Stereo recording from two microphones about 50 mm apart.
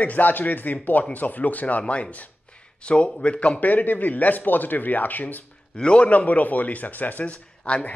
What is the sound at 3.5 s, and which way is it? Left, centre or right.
Speech, left.